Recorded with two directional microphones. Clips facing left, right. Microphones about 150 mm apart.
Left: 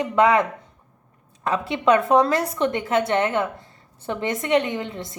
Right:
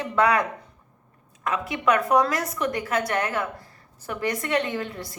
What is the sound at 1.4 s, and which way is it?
A woman's voice, 30° left (ahead or behind).